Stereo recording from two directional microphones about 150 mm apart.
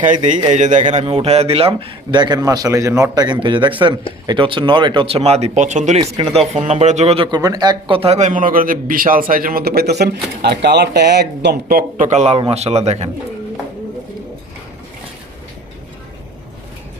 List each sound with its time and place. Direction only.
0.0 s a man's voice: 55° right (ahead or behind)
7.3 s a man's voice: 25° right (ahead or behind); by 13.1 s 45° right (ahead or behind)